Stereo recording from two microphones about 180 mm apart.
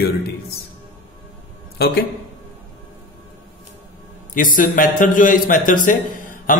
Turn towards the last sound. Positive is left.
turn(degrees=50)  # may be behind; listen again after turning